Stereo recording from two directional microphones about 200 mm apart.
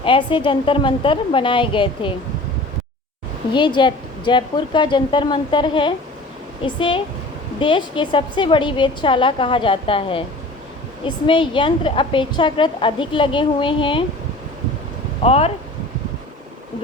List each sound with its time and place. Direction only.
0.0 s a woman's voice: 25° left (ahead or behind)
3.5 s a woman's voice: 25° left (ahead or behind)
15.2 s speech: 30° left (ahead or behind)